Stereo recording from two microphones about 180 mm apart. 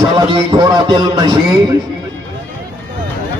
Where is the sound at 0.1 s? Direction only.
25° right (ahead or behind).